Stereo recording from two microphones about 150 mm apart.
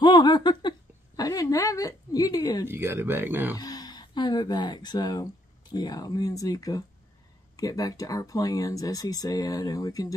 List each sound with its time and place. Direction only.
0.0 s a sound: 30° left (ahead or behind)
2.6 s speech: 15° right (ahead or behind)
3.5 s speech: 25° left (ahead or behind)